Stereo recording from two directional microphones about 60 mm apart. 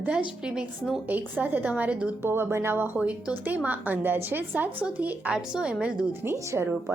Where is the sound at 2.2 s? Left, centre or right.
Right.